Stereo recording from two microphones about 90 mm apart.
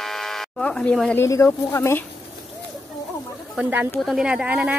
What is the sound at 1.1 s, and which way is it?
Speech, 30° left (ahead or behind).